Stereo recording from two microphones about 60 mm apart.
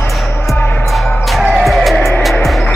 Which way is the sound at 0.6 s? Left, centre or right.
Left.